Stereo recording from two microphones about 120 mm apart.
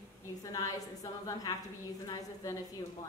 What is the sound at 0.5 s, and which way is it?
A woman's voice, 30° left (ahead or behind).